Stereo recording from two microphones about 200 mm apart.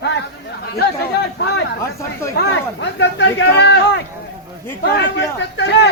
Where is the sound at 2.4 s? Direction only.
50° left (ahead or behind).